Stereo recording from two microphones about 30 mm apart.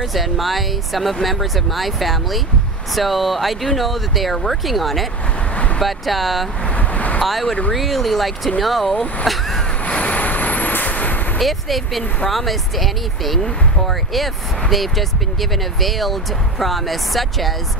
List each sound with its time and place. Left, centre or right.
0.0 s speech: centre
6.7 s vehicle: left
7.2 s speech: centre
9.8 s vehicle: left
10.2 s vehicle: left
11.3 s speech: centre